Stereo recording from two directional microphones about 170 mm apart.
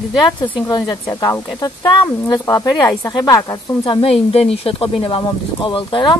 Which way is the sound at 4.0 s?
35° left (ahead or behind).